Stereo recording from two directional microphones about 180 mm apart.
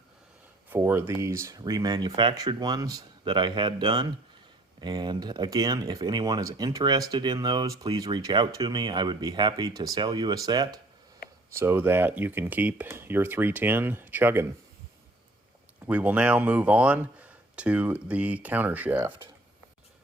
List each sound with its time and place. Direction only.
0.7 s speech: 10° right (ahead or behind)
15.9 s speech: 10° right (ahead or behind)